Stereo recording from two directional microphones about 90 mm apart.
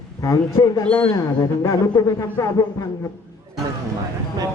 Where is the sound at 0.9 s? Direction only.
15° left (ahead or behind).